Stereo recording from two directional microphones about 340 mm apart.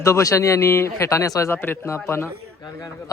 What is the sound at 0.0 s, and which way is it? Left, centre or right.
Speech, centre.